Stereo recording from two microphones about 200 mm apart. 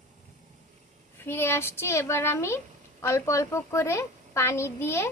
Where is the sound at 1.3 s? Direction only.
10° left (ahead or behind).